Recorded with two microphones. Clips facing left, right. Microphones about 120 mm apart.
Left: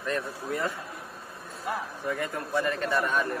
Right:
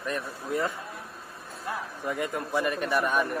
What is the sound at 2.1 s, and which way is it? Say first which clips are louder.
A man's voice: right 1 dB; 20° right (ahead or behind).